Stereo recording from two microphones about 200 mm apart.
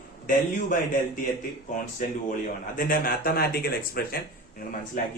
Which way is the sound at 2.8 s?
45° left (ahead or behind).